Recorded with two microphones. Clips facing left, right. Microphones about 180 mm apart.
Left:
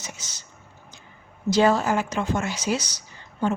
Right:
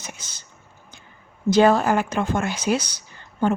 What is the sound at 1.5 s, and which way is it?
A woman's voice, 55° right (ahead or behind).